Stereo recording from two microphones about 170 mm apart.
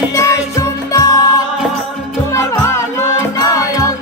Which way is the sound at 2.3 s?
15° left (ahead or behind).